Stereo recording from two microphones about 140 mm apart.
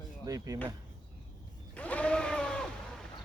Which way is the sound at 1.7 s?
10° left (ahead or behind).